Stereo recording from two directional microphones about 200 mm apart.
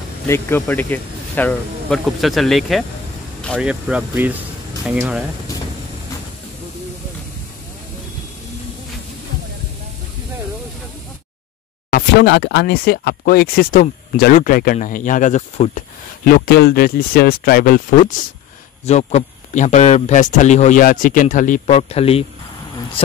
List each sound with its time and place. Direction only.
0.3 s speech: 10° left (ahead or behind)
3.9 s speech: 5° right (ahead or behind)
11.9 s speech: 60° left (ahead or behind); by 15.8 s 35° left (ahead or behind)
16.3 s speech: 50° left (ahead or behind); by 22.2 s 30° left (ahead or behind)